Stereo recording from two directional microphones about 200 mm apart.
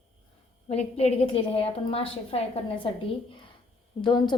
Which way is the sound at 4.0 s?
25° left (ahead or behind).